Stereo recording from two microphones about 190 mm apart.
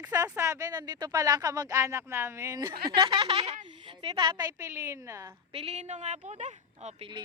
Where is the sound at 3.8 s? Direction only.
25° right (ahead or behind).